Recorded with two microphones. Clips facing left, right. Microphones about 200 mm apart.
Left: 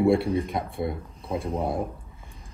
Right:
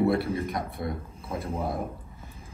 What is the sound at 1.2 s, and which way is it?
Speech, centre (ahead or behind).